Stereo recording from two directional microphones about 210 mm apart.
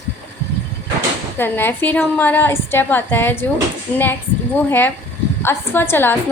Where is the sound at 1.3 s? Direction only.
10° left (ahead or behind).